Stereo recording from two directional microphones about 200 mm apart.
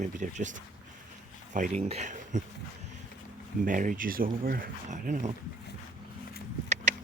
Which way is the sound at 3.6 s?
40° right (ahead or behind).